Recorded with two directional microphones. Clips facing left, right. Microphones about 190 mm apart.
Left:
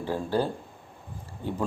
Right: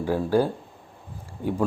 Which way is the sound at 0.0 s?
10° right (ahead or behind).